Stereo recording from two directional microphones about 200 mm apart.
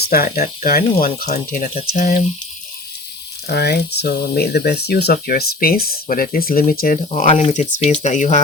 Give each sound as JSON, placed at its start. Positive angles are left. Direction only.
{"t": 0.0, "sound": "speech", "side_deg": 50}
{"t": 3.5, "sound": "speech", "side_deg": 55}